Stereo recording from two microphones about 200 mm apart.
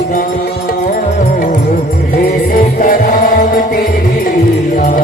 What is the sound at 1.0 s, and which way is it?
Music, 40° left (ahead or behind).